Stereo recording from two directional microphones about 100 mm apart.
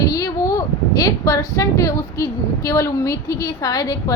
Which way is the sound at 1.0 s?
40° left (ahead or behind).